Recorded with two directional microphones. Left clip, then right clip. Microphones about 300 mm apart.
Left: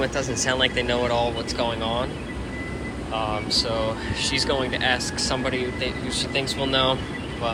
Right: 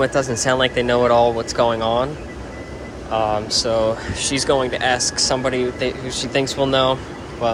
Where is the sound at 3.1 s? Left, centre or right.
Right.